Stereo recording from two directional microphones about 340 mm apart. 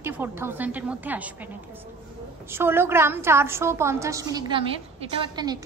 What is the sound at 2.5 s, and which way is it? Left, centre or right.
A woman's voice, centre.